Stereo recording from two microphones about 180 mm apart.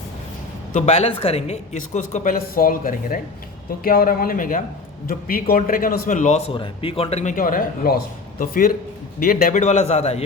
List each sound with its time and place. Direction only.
0.7 s a man's voice: 40° left (ahead or behind)
6.5 s a man's voice: 30° left (ahead or behind)